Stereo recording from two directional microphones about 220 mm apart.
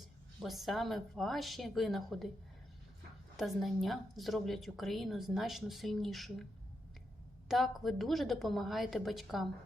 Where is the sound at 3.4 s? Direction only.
Centre (ahead or behind).